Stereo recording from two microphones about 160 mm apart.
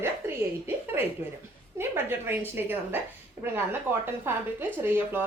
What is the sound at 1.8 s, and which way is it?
Speech, 15° right (ahead or behind).